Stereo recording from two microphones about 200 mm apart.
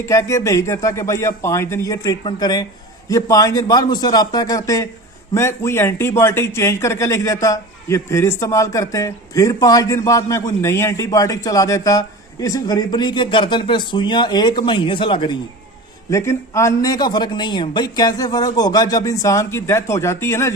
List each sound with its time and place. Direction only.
0.0 s speech: 15° left (ahead or behind)
16.0 s speech: 15° left (ahead or behind)